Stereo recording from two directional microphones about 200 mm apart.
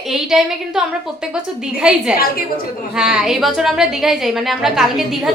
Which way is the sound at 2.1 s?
45° left (ahead or behind).